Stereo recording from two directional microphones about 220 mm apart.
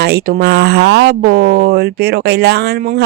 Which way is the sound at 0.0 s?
45° right (ahead or behind).